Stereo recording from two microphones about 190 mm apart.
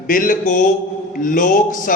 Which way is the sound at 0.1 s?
45° left (ahead or behind).